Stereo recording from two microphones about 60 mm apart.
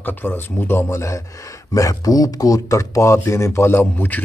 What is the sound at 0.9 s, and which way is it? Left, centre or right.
Speech, left.